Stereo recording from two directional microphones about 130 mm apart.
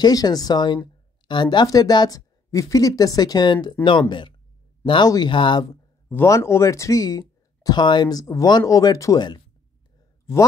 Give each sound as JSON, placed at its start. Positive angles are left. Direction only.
{"t": 0.0, "sound": "speech", "side_deg": 30}
{"t": 4.8, "sound": "speech", "side_deg": 35}
{"t": 6.0, "sound": "speech", "side_deg": 20}